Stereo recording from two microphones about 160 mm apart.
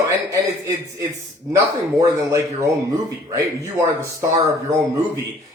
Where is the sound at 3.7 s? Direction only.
20° right (ahead or behind).